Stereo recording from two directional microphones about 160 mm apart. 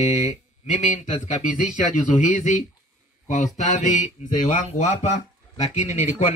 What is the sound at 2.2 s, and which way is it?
Speech, 50° left (ahead or behind).